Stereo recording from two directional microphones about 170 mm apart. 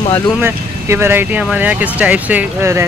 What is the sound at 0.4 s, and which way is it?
Speech, 15° right (ahead or behind).